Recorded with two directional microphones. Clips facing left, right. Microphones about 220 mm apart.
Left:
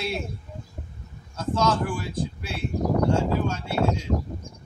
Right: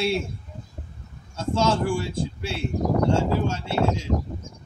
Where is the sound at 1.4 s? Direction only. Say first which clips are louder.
Right 1 dB; 25° right (ahead or behind).